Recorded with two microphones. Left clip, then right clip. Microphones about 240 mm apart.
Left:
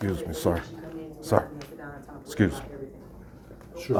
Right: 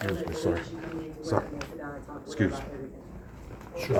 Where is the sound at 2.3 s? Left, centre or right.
Left.